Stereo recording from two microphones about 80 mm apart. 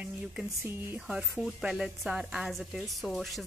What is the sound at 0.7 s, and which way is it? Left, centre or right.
Speech, right.